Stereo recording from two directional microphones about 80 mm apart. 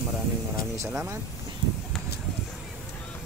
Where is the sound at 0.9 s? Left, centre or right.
Right.